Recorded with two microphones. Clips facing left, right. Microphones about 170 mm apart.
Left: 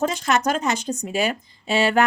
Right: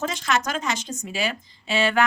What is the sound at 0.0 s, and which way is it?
Speech, 40° left (ahead or behind).